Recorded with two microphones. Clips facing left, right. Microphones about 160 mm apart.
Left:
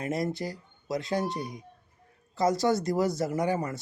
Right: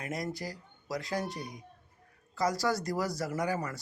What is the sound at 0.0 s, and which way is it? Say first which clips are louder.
Speech: left 6 dB; 25° left (ahead or behind).